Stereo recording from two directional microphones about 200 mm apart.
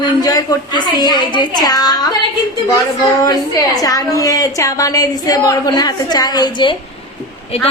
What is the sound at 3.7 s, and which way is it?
A woman's voice, 20° left (ahead or behind).